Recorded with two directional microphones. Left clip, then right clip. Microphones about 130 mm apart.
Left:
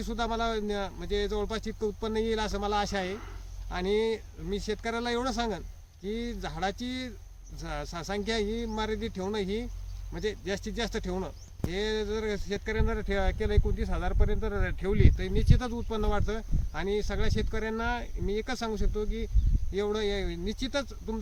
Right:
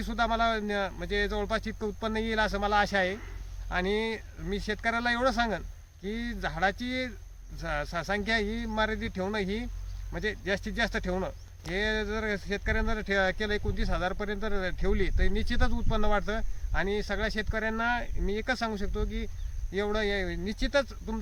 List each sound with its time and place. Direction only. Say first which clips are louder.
0.0 s speech: right 4 dB; 25° right (ahead or behind)